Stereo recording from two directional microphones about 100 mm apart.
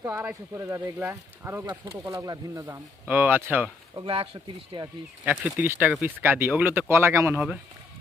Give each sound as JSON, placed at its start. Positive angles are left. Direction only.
{"t": 0.0, "sound": "speech", "side_deg": -30}
{"t": 2.2, "sound": "speech", "side_deg": -35}
{"t": 3.1, "sound": "speech", "side_deg": -20}
{"t": 4.0, "sound": "speech", "side_deg": -65}
{"t": 5.2, "sound": "speech", "side_deg": -15}
{"t": 7.3, "sound": "speech", "side_deg": -10}